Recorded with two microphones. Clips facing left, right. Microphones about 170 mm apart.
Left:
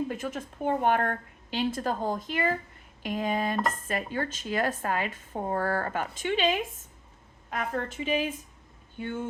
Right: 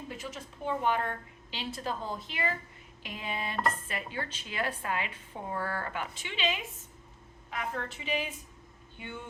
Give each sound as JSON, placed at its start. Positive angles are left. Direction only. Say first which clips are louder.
{"t": 0.1, "sound": "speech", "louder": "left 7 dB", "side_deg": 50}